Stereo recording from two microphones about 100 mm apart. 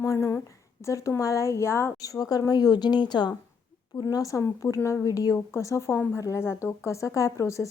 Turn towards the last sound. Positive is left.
turn(degrees=30)  # may be behind; listen again after turning